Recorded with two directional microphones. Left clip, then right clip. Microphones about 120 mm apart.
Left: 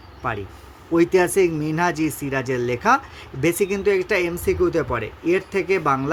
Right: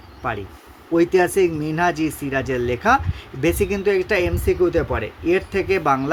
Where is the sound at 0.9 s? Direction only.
15° left (ahead or behind); by 6.1 s centre (ahead or behind).